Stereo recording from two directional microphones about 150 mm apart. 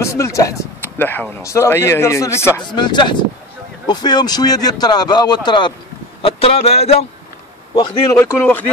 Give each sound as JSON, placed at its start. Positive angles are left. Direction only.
{"t": 0.0, "sound": "speech", "side_deg": 20}
{"t": 2.7, "sound": "speech", "side_deg": 30}
{"t": 8.1, "sound": "speech", "side_deg": 15}